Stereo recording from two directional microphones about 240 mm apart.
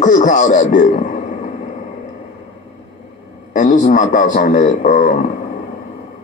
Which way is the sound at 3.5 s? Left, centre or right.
Left.